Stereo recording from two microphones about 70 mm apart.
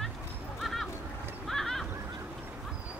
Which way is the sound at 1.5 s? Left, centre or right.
Centre.